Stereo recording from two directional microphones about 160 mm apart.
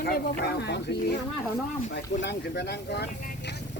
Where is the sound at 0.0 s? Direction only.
85° left.